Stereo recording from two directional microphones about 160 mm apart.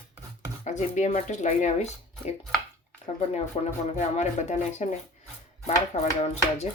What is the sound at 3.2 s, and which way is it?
Speech, 45° left (ahead or behind).